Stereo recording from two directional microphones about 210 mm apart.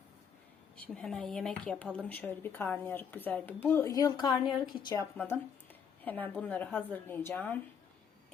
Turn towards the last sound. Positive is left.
turn(degrees=10)  # may be behind; listen again after turning